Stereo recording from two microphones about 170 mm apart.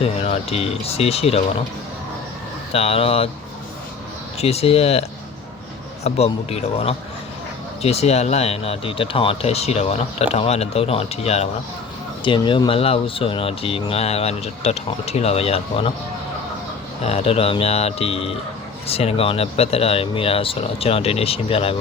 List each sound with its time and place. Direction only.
0.0 s speech: 35° left (ahead or behind)
2.7 s speech: 35° left (ahead or behind)
4.4 s speech: 35° left (ahead or behind)
17.0 s speech: 40° left (ahead or behind)